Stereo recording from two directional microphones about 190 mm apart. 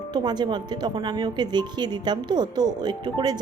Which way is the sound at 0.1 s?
20° right (ahead or behind).